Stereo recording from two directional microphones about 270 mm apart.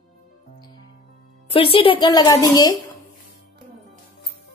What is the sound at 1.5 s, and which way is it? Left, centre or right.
A woman's voice, centre.